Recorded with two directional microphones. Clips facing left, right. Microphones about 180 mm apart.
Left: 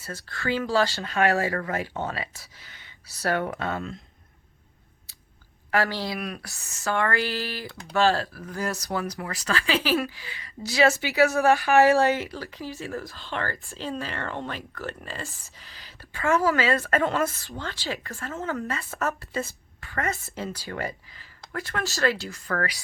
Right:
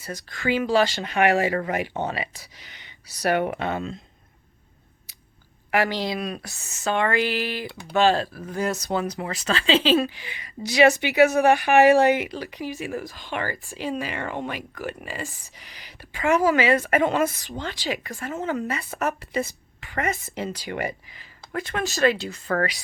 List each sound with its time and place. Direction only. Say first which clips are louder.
0.0 s speech: right 3 dB; 15° right (ahead or behind)
5.7 s a woman's voice: right 2 dB; 15° right (ahead or behind)